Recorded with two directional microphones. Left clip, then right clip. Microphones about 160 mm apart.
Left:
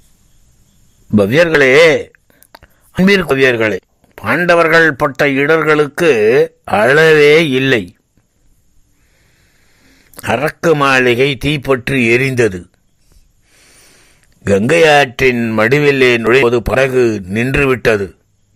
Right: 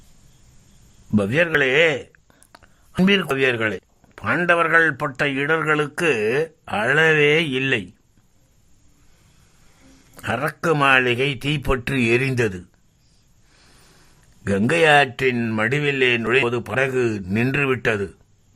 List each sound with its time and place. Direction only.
1.1 s speech: 20° left (ahead or behind)
10.2 s speech: 20° left (ahead or behind)
13.5 s a sound: 10° left (ahead or behind)
14.7 s speech: 20° left (ahead or behind)
15.5 s speech: 30° left (ahead or behind)